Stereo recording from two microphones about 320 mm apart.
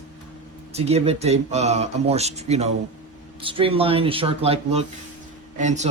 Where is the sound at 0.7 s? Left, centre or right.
Centre.